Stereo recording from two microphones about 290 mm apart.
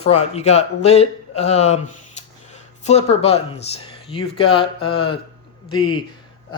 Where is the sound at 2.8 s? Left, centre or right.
Left.